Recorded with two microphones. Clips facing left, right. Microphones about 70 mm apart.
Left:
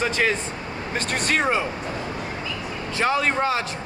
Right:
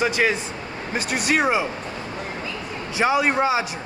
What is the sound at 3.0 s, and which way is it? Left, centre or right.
Speech, centre.